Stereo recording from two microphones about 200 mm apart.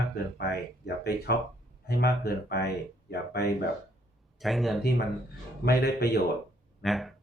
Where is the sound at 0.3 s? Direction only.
50° left (ahead or behind).